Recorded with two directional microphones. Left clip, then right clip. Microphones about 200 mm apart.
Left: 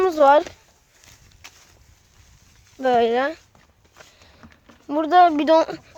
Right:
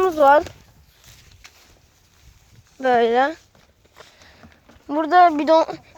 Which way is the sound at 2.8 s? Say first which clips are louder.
Right 2 dB; centre (ahead or behind).